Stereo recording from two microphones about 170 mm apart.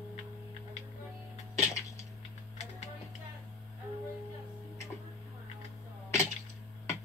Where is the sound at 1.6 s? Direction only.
15° left (ahead or behind).